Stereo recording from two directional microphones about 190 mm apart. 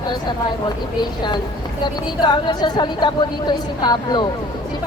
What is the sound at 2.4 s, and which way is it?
Speech, 25° left (ahead or behind).